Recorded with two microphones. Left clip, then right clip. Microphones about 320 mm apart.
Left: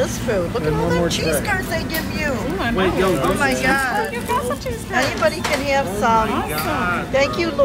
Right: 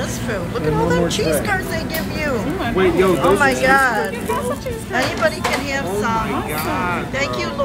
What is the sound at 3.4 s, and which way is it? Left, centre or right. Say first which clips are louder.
Speech: right 4 dB; centre.